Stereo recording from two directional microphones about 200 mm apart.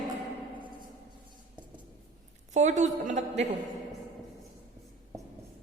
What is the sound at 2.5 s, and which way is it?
Speech, 35° right (ahead or behind).